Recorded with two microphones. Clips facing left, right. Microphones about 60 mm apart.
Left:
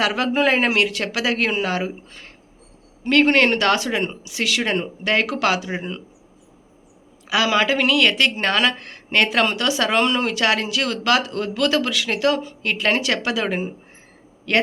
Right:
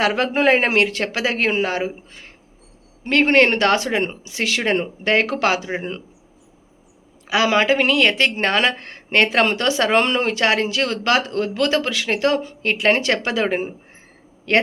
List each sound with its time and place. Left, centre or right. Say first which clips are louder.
0.0 s speech: right 2 dB; right
7.3 s speech: right 2 dB; right